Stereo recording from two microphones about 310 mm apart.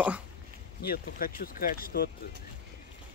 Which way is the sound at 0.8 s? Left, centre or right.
Left.